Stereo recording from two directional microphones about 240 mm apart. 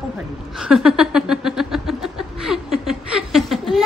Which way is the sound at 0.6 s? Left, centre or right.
Centre.